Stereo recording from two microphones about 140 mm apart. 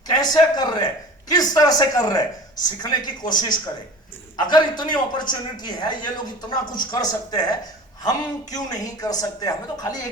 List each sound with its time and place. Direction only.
0.2 s a man's voice: 30° left (ahead or behind)